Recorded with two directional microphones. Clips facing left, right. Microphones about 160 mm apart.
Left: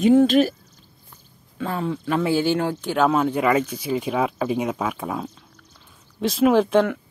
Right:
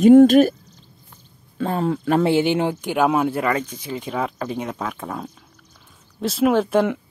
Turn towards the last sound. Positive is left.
turn(degrees=0)  # may be behind; listen again after turning